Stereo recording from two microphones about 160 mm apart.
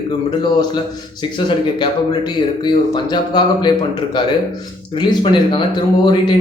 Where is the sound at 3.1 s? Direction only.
30° left (ahead or behind).